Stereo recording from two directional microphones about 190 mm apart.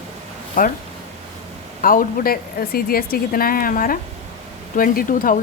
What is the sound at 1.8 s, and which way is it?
Speech, 45° left (ahead or behind).